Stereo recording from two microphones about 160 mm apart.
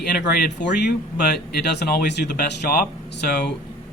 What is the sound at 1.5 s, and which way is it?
Speech, 85° left.